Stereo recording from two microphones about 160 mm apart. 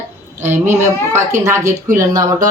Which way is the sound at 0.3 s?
15° right (ahead or behind).